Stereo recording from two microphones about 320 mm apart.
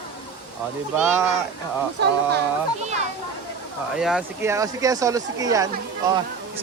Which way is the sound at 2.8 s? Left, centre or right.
Right.